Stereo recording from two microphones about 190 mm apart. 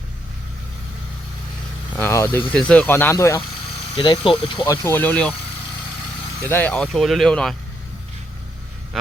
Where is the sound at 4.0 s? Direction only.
25° left (ahead or behind).